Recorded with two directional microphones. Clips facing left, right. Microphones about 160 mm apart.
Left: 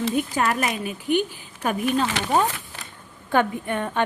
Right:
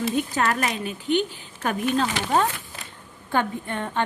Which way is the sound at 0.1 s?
10° left (ahead or behind).